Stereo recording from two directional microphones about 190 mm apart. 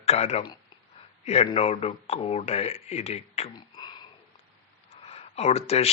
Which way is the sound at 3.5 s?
20° left (ahead or behind).